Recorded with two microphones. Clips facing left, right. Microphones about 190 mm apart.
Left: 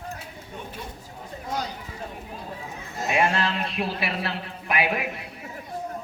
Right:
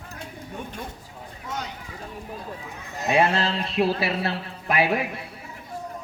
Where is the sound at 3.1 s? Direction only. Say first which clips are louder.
Right 3 dB; 35° right (ahead or behind).